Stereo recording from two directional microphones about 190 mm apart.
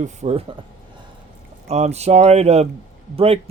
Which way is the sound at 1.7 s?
35° right (ahead or behind).